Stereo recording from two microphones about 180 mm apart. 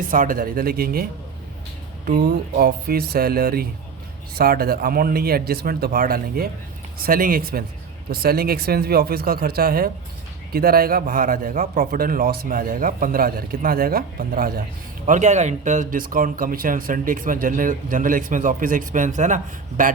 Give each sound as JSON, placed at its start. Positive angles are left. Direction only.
{"t": 0.1, "sound": "speech", "side_deg": -50}
{"t": 2.0, "sound": "speech", "side_deg": -55}
{"t": 15.0, "sound": "speech", "side_deg": -45}